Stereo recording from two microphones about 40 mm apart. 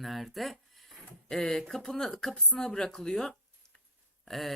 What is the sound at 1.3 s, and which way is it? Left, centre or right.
A woman's voice, centre.